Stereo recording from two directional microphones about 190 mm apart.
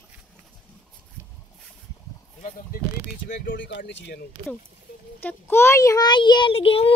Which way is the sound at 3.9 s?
65° left (ahead or behind).